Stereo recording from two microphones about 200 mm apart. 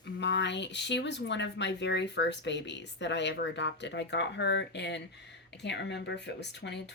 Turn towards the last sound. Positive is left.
turn(degrees=60)  # may be behind; listen again after turning